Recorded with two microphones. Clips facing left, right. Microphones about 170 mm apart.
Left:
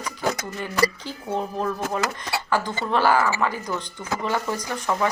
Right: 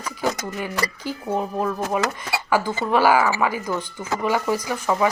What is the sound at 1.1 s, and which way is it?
Speech, 10° right (ahead or behind).